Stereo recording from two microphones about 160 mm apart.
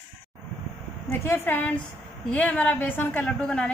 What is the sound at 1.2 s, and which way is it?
A woman's voice, 15° left (ahead or behind).